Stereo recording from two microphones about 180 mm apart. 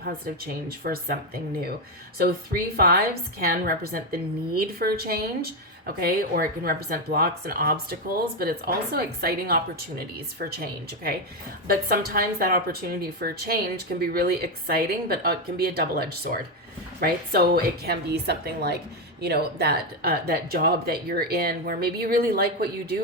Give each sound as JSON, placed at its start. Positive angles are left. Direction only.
{"t": 0.4, "sound": "a woman's voice", "side_deg": -60}